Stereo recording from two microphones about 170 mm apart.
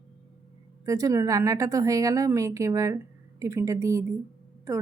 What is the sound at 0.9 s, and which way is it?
Speech, 20° right (ahead or behind).